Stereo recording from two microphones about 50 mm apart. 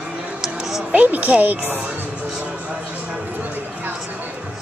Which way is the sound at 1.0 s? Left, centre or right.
Right.